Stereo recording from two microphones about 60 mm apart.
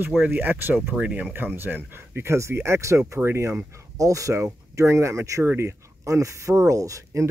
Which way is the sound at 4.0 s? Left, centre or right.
Right.